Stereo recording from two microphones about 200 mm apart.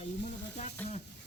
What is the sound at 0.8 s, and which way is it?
Speech, 10° left (ahead or behind).